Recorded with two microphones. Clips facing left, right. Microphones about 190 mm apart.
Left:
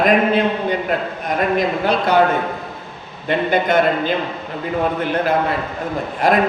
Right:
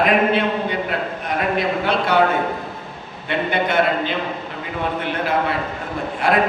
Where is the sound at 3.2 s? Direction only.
40° left (ahead or behind).